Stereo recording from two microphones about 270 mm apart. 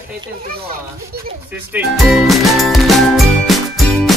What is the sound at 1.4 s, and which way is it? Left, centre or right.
Music, centre.